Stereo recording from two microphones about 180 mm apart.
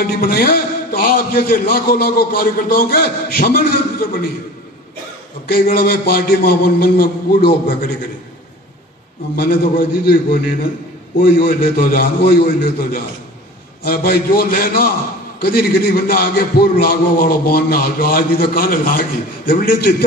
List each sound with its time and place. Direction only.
0.0 s a man's voice: 55° left (ahead or behind)
5.5 s a man's voice: 55° left (ahead or behind)
9.3 s a man's voice: 55° left (ahead or behind)
11.1 s a man's voice: 55° left (ahead or behind)
13.8 s a man's voice: 55° left (ahead or behind)